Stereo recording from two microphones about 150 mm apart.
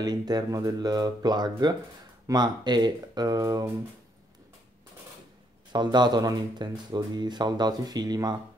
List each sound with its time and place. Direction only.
0.0 s speech: 25° right (ahead or behind)
5.7 s speech: 30° right (ahead or behind)